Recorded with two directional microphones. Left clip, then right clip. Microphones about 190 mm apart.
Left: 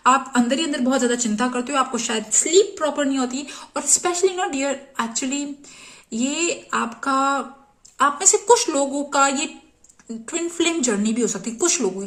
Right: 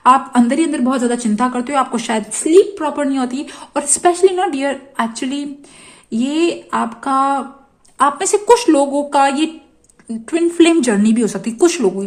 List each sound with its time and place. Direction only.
0.0 s speech: 35° right (ahead or behind)